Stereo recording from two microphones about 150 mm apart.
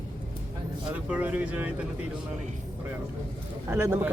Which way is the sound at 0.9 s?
10° right (ahead or behind).